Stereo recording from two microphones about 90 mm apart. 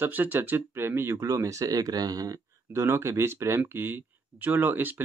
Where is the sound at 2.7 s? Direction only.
30° right (ahead or behind).